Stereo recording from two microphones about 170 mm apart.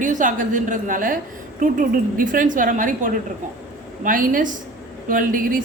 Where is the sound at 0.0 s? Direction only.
50° right (ahead or behind).